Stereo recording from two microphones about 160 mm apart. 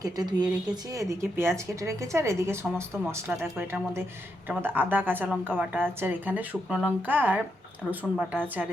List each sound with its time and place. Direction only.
0.0 s speech: 25° right (ahead or behind)
8.1 s a woman's voice: centre (ahead or behind)